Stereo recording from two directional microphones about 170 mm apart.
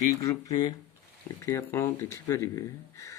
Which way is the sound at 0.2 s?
20° left (ahead or behind).